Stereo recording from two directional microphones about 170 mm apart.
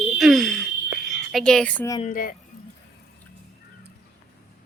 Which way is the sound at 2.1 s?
55° left (ahead or behind).